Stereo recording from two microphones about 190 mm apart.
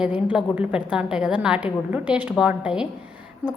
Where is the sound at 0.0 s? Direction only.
5° right (ahead or behind).